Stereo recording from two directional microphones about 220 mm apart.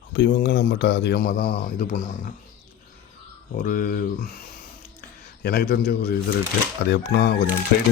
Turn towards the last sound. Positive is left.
turn(degrees=45)  # may be behind; listen again after turning